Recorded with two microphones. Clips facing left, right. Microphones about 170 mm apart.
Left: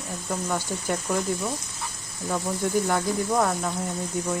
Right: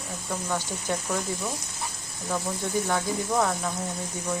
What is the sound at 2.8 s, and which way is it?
Speech, 5° left (ahead or behind).